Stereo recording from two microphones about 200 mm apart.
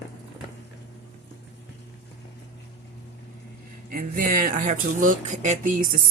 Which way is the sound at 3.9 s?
45° right (ahead or behind).